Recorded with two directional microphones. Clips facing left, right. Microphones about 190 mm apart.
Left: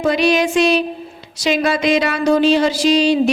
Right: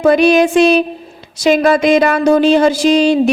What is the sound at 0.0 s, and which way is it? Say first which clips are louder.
A woman's voice: right 6 dB; 50° right (ahead or behind).